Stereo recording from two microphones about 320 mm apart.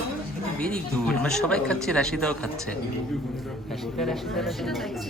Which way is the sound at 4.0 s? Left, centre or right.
Centre.